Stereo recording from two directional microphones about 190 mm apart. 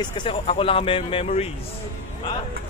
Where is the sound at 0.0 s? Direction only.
25° left (ahead or behind).